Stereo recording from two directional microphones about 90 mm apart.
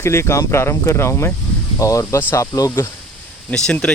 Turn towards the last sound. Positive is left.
turn(degrees=10)  # may be behind; listen again after turning